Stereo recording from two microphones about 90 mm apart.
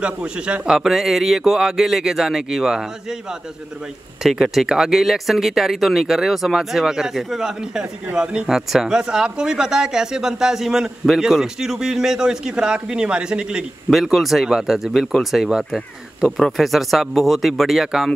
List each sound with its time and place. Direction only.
0.0 s speech: 10° right (ahead or behind)